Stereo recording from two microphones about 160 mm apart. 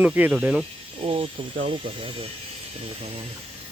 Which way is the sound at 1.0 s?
35° right (ahead or behind).